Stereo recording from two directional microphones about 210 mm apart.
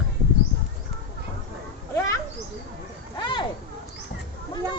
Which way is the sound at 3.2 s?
25° left (ahead or behind).